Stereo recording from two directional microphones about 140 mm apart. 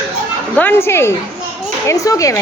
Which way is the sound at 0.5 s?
15° left (ahead or behind).